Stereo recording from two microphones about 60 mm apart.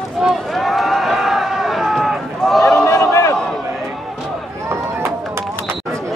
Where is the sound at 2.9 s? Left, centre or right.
Left.